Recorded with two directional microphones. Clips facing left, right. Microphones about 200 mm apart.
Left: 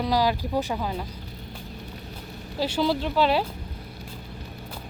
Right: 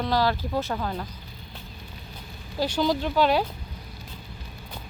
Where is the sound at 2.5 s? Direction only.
5° left (ahead or behind).